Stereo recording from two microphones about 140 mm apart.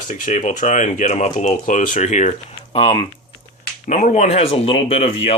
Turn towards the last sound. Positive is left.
turn(degrees=45)  # may be behind; listen again after turning